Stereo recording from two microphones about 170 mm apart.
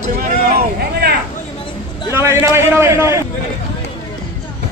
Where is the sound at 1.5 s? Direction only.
30° left (ahead or behind).